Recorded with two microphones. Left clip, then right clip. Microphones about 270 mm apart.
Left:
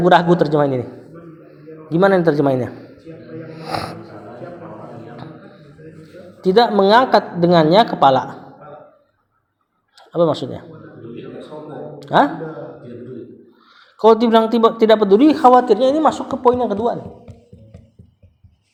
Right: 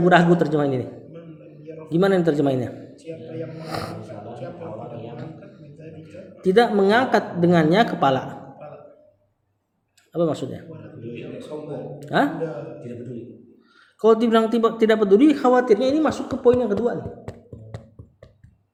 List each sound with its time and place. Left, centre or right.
0.0 s a woman's voice: centre
1.9 s a woman's voice: centre
3.5 s snort: centre
6.4 s a woman's voice: centre
10.1 s a woman's voice: centre
11.9 s a sound: centre
14.0 s a woman's voice: centre